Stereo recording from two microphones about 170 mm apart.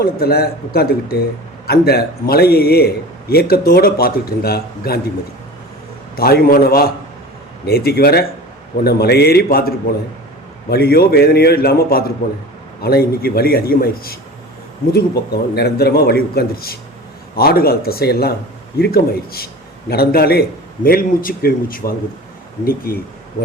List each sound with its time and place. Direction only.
0.0 s a man's voice: 65° left (ahead or behind)
6.1 s a man's voice: 60° left (ahead or behind)